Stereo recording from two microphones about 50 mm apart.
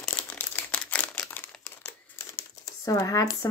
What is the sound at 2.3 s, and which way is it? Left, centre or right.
Crumpling, left.